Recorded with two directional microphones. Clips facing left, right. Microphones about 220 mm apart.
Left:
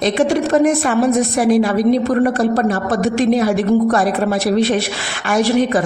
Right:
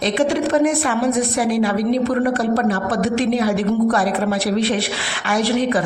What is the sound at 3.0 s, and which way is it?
Speech, 45° left (ahead or behind).